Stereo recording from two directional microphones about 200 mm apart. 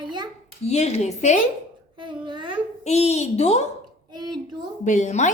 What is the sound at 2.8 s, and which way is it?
Speech, 35° left (ahead or behind).